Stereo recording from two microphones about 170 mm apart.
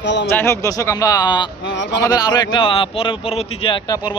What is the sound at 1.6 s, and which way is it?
Speech, 90° left.